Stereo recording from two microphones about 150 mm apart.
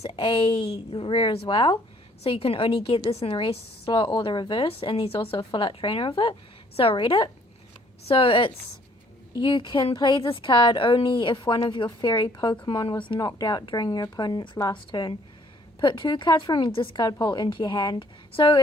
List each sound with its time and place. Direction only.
0.0 s a woman's voice: 35° left (ahead or behind)